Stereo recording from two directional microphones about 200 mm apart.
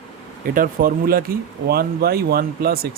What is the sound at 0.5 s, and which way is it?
Speech, 45° right (ahead or behind).